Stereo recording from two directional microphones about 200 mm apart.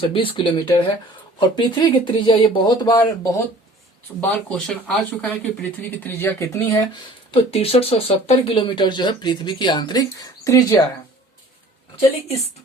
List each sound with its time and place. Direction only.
0.0 s speech: 25° left (ahead or behind)
4.2 s speech: 5° left (ahead or behind)
7.3 s speech: 30° left (ahead or behind)